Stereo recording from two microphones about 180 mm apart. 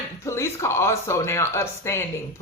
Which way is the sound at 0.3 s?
15° left (ahead or behind).